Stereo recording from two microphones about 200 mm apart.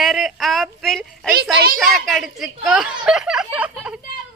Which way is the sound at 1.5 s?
50° right (ahead or behind).